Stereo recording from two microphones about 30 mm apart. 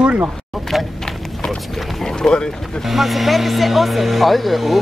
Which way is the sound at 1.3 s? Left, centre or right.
Centre.